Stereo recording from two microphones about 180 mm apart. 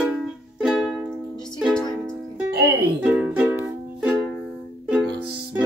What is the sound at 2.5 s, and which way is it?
Music, 60° right (ahead or behind).